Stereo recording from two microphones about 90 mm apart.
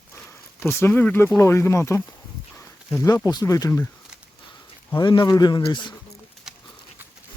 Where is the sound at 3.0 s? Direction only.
45° left (ahead or behind).